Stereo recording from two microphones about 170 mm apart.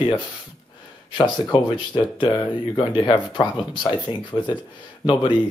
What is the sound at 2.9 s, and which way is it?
Speech, 30° left (ahead or behind).